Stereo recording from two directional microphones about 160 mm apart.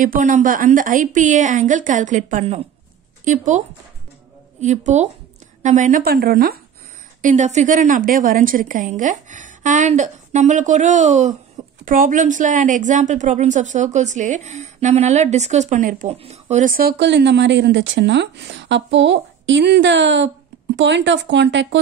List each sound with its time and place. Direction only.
0.0 s a woman's voice: 55° right (ahead or behind); by 6.6 s 70° right (ahead or behind)
7.2 s a woman's voice: 50° right (ahead or behind)
11.8 s a woman's voice: 60° right (ahead or behind)
16.1 s speech: 40° right (ahead or behind); by 21.6 s 90° right